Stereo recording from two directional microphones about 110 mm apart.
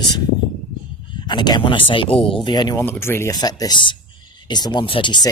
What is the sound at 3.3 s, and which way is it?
Speech, 35° left (ahead or behind).